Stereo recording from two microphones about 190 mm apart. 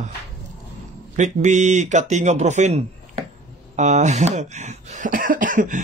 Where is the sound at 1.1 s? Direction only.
40° right (ahead or behind).